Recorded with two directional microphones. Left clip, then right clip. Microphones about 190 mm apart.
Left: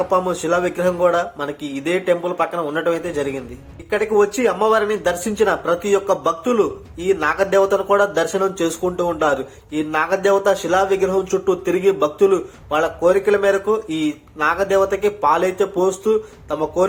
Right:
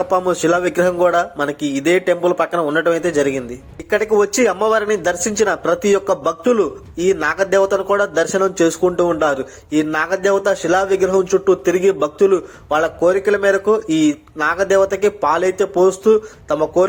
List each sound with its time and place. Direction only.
0.0 s speech: 30° right (ahead or behind)